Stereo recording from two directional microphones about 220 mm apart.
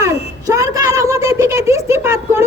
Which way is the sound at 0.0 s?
15° right (ahead or behind).